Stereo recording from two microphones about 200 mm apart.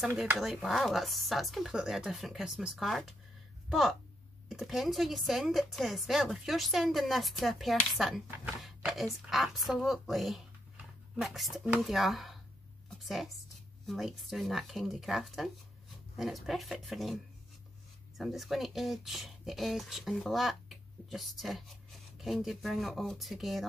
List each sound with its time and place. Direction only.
0.0 s a woman's voice: 5° right (ahead or behind)